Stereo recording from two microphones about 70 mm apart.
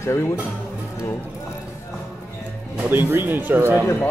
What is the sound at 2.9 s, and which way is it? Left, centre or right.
Speech, right.